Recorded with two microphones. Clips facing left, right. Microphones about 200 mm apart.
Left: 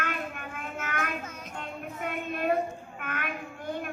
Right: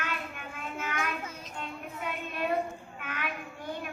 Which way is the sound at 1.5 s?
50° left (ahead or behind).